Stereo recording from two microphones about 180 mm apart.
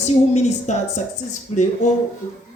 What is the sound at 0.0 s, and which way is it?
A woman's voice, 40° left (ahead or behind).